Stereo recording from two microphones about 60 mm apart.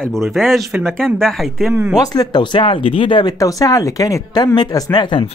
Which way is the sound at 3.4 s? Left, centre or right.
Left.